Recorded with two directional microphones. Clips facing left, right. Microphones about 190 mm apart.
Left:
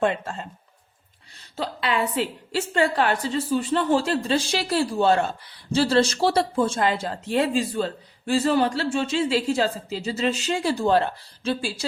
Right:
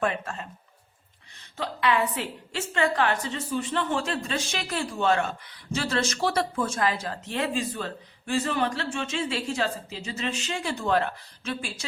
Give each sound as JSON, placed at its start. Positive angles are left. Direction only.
{"t": 0.0, "sound": "speech", "side_deg": 25}
{"t": 1.5, "sound": "a woman's voice", "side_deg": 30}